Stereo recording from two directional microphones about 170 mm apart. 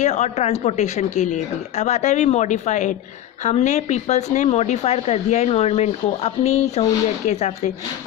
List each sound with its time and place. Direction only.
0.0 s speech: 40° left (ahead or behind)